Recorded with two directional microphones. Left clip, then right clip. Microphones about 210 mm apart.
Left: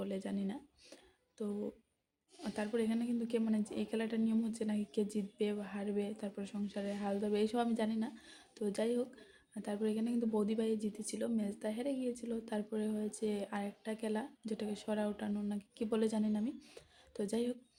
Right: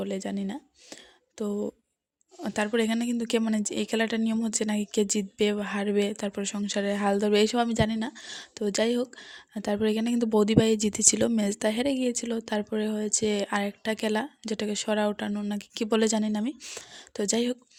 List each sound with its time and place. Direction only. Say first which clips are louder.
0.0 s a woman's voice: right 9 dB; 40° right (ahead or behind)